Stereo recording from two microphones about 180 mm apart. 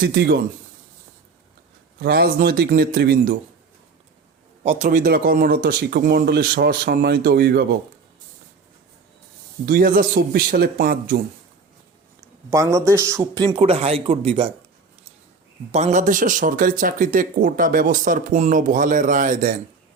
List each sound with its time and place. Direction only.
0.0 s speech: 60° right (ahead or behind)
2.0 s speech: 60° right (ahead or behind)
4.6 s speech: 40° right (ahead or behind); by 7.7 s 65° right (ahead or behind)
9.6 s speech: 55° right (ahead or behind)
12.5 s a man's voice: 15° right (ahead or behind); by 14.5 s 30° right (ahead or behind)
15.7 s speech: 40° right (ahead or behind)